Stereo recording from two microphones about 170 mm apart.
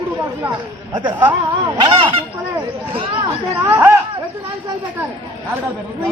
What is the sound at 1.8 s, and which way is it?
Speech, 30° right (ahead or behind).